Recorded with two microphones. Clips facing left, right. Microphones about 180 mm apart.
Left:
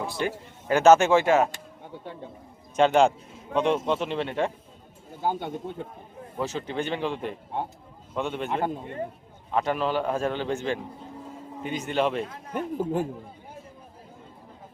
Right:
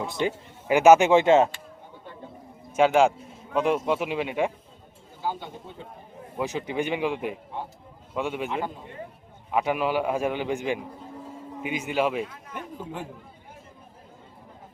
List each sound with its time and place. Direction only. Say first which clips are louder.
0.0 s speech: right 2 dB; 20° right (ahead or behind)
2.7 s a man's voice: even; 5° right (ahead or behind)
5.2 s a man's voice: left 4 dB; 55° left (ahead or behind)
6.3 s a man's voice: right 1 dB; 15° right (ahead or behind)
8.4 s a man's voice: left 2 dB; 50° left (ahead or behind)
9.5 s a man's voice: right 1 dB; 10° right (ahead or behind)
12.2 s a man's voice: left 4 dB; 40° left (ahead or behind)